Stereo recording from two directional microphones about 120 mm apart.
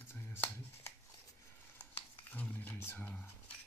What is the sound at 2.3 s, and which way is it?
Speech, 15° left (ahead or behind).